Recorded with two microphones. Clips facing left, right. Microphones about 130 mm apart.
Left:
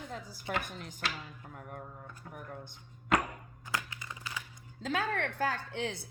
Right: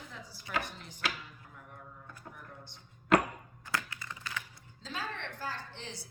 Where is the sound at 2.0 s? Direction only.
50° left (ahead or behind).